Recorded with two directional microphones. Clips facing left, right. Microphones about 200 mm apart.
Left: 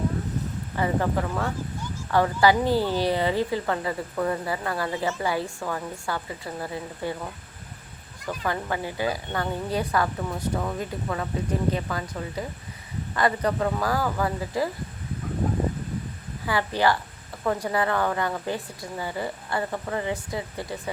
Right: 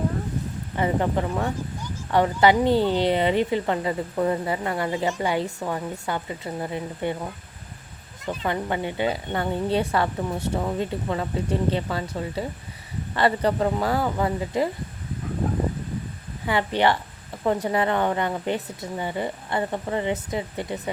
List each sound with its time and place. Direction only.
0.8 s a woman's voice: 20° right (ahead or behind)
8.2 s a woman's voice: 25° right (ahead or behind)
16.5 s a woman's voice: 25° right (ahead or behind)